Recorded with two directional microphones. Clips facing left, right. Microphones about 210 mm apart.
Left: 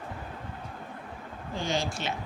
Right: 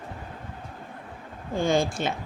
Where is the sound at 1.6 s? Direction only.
50° right (ahead or behind).